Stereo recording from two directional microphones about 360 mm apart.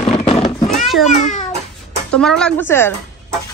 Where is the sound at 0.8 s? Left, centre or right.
Centre.